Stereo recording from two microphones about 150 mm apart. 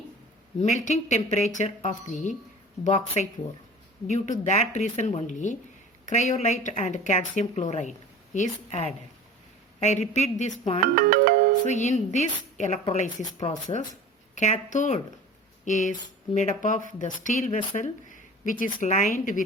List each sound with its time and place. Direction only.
0.6 s a woman's voice: 55° left (ahead or behind)
4.0 s a woman's voice: 55° left (ahead or behind)
10.9 s music: 75° right (ahead or behind)
11.6 s a woman's voice: 50° left (ahead or behind)